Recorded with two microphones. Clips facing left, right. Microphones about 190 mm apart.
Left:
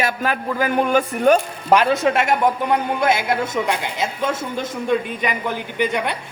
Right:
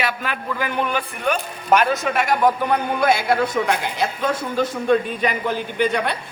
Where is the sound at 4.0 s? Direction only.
20° left (ahead or behind).